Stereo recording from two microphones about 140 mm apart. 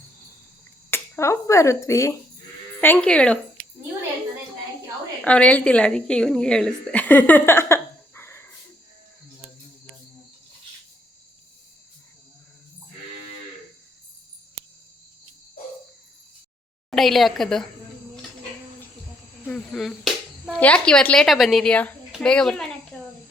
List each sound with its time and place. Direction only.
0.9 s speech: 15° left (ahead or behind)
2.8 s speech: 10° left (ahead or behind)
5.2 s a woman's voice: 10° left (ahead or behind)
16.9 s a woman's voice: centre (ahead or behind)
19.5 s a woman's voice: 10° left (ahead or behind)
22.9 s a sound: 15° left (ahead or behind)